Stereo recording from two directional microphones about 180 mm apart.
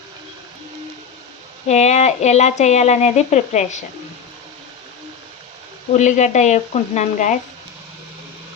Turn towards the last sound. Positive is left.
turn(degrees=45)  # may be behind; listen again after turning